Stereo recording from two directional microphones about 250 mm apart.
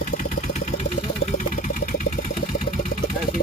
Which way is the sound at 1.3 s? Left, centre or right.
Left.